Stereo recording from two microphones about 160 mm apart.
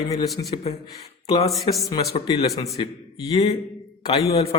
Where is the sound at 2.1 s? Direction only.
30° left (ahead or behind).